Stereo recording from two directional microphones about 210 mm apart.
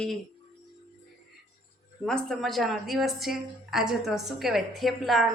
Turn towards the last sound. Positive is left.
turn(degrees=0)  # may be behind; listen again after turning